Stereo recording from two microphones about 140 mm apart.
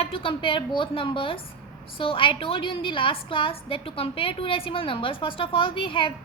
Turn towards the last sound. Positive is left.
turn(degrees=40)  # may be behind; listen again after turning